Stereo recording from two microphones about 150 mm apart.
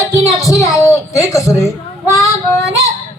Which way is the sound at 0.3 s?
20° left (ahead or behind).